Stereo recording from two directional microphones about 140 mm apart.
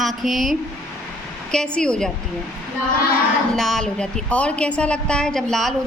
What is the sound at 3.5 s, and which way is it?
A woman's voice, 5° left (ahead or behind).